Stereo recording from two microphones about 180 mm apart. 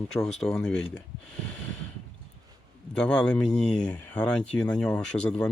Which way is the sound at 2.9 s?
5° left (ahead or behind).